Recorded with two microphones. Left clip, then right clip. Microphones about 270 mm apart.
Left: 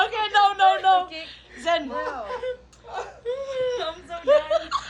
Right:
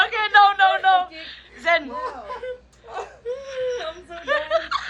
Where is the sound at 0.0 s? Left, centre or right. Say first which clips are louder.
Right 4 dB; centre.